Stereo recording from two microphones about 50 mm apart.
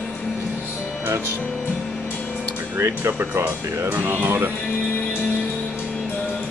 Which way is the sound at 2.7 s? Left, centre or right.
Right.